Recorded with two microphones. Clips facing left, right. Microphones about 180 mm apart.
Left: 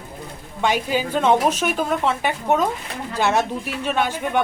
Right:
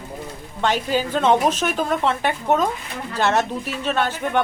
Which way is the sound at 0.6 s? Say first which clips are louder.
Even; 10° left (ahead or behind).